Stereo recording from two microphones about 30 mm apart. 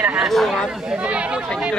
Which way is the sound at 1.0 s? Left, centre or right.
Right.